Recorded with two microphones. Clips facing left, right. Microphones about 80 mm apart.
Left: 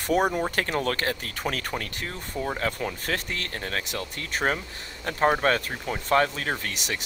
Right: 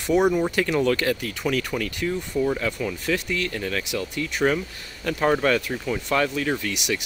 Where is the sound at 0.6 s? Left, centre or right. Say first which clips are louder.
Right 5 dB; left.